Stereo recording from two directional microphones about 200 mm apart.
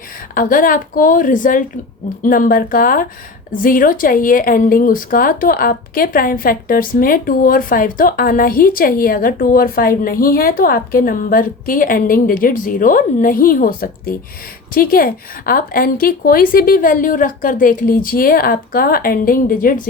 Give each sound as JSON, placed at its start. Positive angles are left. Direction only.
{"t": 0.3, "sound": "speech", "side_deg": 45}